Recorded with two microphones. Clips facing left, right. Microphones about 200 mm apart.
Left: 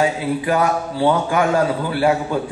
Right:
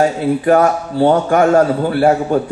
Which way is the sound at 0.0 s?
45° right (ahead or behind).